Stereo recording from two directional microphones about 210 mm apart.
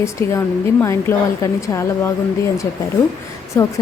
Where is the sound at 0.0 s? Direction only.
15° left (ahead or behind).